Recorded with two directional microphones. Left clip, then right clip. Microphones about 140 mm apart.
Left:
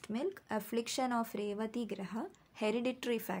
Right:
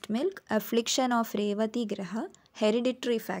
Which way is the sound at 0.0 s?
50° right (ahead or behind).